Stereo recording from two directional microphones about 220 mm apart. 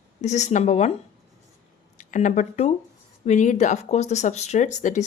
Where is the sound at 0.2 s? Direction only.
30° left (ahead or behind).